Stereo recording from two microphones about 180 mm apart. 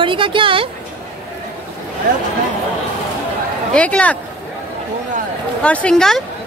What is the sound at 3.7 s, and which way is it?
Speech, 5° left (ahead or behind).